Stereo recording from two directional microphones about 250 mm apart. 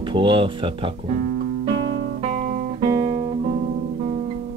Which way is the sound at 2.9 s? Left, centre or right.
Right.